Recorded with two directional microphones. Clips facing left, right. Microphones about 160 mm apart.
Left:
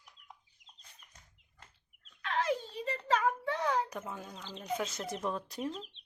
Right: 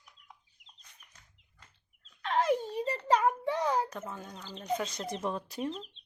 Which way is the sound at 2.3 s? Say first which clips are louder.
Right 5 dB; 45° right (ahead or behind).